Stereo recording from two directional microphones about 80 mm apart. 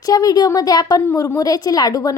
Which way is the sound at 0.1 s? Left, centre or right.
Left.